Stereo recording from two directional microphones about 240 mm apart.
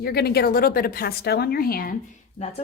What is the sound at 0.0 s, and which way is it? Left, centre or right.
A woman's voice, left.